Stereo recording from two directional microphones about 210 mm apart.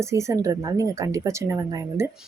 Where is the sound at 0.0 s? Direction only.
15° right (ahead or behind).